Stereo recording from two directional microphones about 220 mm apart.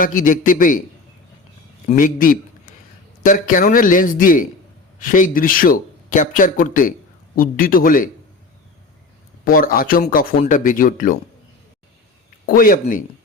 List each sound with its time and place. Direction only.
0.0 s speech: 35° left (ahead or behind)
1.9 s speech: 35° left (ahead or behind)
9.4 s speech: 40° left (ahead or behind)
12.5 s speech: 40° left (ahead or behind)